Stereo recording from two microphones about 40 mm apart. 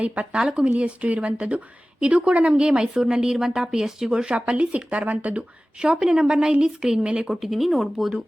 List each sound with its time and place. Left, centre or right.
0.0 s speech: right
0.4 s a woman's voice: centre
0.8 s a woman's voice: right
7.5 s speech: centre